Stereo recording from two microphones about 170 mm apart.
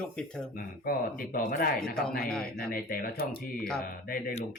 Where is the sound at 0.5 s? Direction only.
55° left (ahead or behind).